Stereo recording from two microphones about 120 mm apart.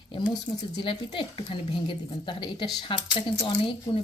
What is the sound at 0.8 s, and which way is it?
A woman's voice, 45° left (ahead or behind).